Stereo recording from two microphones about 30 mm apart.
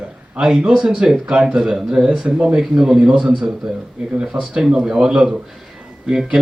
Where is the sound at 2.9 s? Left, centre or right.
Right.